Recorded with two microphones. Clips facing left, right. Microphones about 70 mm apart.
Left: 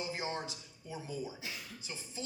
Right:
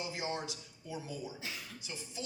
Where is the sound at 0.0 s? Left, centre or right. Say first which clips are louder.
Even; left.